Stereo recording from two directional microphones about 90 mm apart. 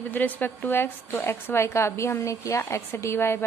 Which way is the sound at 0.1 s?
20° left (ahead or behind).